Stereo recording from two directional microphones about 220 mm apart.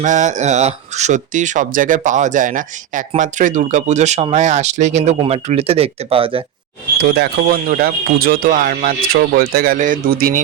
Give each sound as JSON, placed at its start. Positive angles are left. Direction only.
{"t": 0.0, "sound": "speech", "side_deg": -35}
{"t": 7.0, "sound": "speech", "side_deg": -50}